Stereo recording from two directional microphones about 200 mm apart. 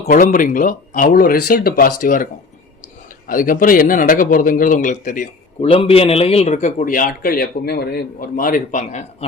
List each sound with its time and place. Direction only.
0.0 s a man's voice: 40° left (ahead or behind)
3.2 s a man's voice: 45° left (ahead or behind)